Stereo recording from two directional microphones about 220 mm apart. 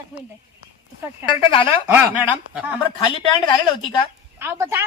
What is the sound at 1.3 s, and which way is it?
Speech, 25° left (ahead or behind).